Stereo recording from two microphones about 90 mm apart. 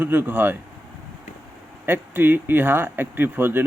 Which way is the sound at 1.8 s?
25° right (ahead or behind).